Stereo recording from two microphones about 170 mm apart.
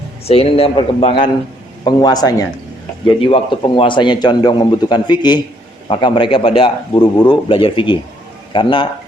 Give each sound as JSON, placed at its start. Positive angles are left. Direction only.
{"t": 0.3, "sound": "a man's voice", "side_deg": 35}
{"t": 6.9, "sound": "speech", "side_deg": 15}
{"t": 7.3, "sound": "a man's voice", "side_deg": 30}